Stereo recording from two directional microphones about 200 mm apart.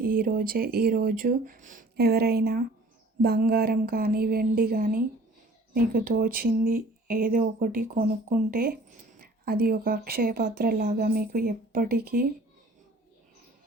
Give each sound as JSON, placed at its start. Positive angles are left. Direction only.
{"t": 0.0, "sound": "speech", "side_deg": -45}